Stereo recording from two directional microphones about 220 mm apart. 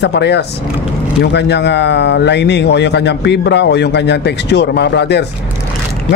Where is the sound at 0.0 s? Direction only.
50° left (ahead or behind).